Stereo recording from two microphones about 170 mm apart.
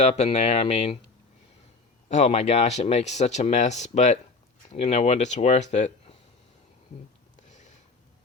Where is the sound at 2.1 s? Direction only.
40° left (ahead or behind).